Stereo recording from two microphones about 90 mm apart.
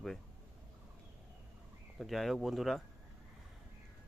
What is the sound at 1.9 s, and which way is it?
Speech, centre (ahead or behind).